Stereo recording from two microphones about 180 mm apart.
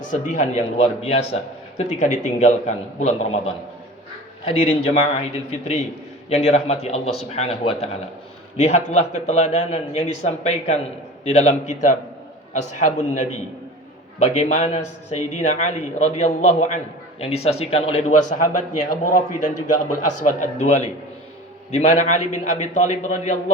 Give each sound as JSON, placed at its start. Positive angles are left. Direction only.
{"t": 0.0, "sound": "a man's voice", "side_deg": 45}
{"t": 5.1, "sound": "a man's voice", "side_deg": 40}